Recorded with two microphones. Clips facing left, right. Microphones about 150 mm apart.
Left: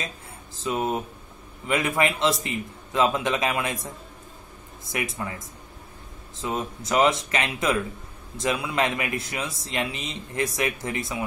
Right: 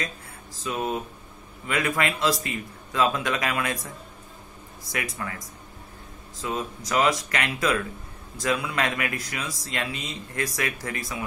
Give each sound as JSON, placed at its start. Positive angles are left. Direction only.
{"t": 0.7, "sound": "speech", "side_deg": 20}
{"t": 4.9, "sound": "speech", "side_deg": 20}